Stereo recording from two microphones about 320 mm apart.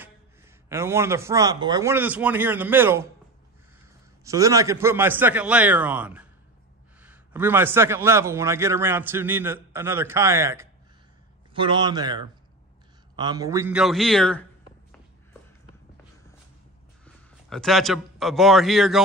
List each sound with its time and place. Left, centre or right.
0.7 s a man's voice: centre
4.2 s a man's voice: centre
17.0 s a man's voice: centre